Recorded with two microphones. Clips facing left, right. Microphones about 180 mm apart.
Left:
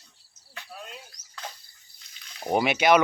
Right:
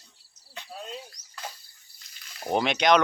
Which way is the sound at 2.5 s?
10° left (ahead or behind).